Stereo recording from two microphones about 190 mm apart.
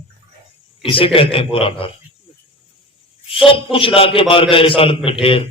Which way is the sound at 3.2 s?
30° left (ahead or behind).